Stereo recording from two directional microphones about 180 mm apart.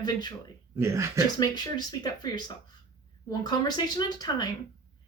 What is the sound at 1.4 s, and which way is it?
Speech, 20° left (ahead or behind).